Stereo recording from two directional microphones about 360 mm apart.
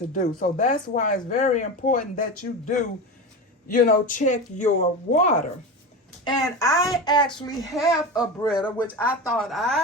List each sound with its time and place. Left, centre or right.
0.1 s speech: left
7.7 s speech: centre